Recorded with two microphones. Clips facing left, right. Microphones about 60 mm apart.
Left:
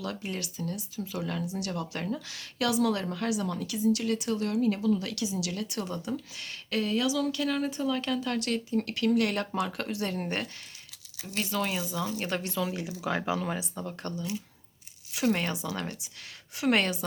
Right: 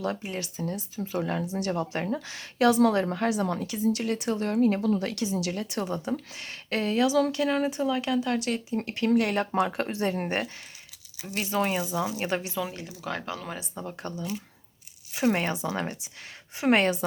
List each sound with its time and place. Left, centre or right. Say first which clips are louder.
0.0 s speech: right 4 dB; right; by 12.7 s centre
13.0 s speech: left 3 dB; centre
13.7 s speech: right 1 dB; centre
15.1 s speech: right 3 dB; right